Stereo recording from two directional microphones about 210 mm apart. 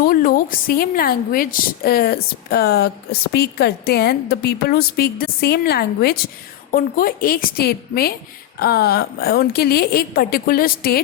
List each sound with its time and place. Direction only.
0.0 s a woman's voice: 45° left (ahead or behind)